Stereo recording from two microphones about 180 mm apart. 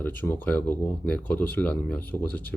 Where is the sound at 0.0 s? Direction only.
10° left (ahead or behind).